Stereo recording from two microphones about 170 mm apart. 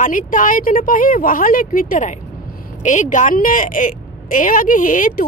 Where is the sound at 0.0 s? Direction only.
50° left (ahead or behind).